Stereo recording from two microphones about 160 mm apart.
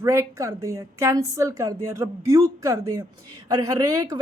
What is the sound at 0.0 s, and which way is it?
Speech, 20° right (ahead or behind).